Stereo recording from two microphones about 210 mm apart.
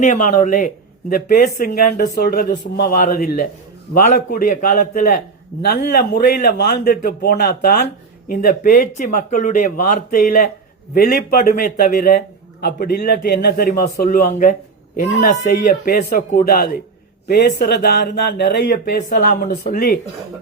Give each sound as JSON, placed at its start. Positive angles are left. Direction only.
{"t": 0.0, "sound": "speech", "side_deg": 35}